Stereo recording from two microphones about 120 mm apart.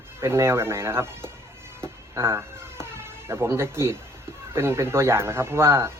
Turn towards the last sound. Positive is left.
turn(degrees=-20)  # may be behind; listen again after turning